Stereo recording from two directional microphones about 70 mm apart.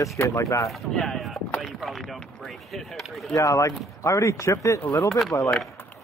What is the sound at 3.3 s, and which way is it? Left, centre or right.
Speech, left.